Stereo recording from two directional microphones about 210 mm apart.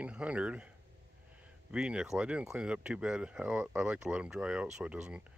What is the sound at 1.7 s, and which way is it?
Speech, 5° right (ahead or behind).